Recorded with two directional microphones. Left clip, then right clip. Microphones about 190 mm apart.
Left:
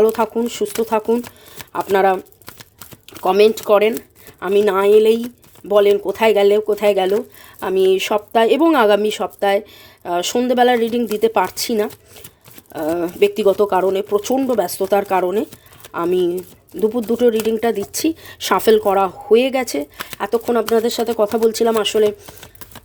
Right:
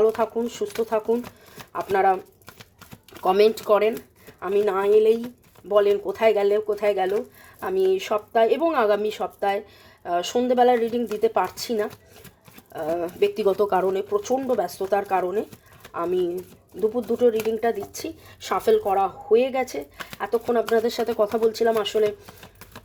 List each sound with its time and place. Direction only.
0.0 s speech: 40° left (ahead or behind)
3.2 s speech: 25° left (ahead or behind)